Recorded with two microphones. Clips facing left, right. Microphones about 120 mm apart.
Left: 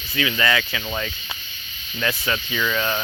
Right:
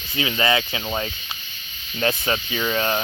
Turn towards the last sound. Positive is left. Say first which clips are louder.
# right 1 dB
turn(degrees=-35)  # may be behind; listen again after turning